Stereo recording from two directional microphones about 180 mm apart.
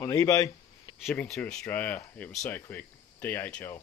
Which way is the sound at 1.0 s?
Centre (ahead or behind).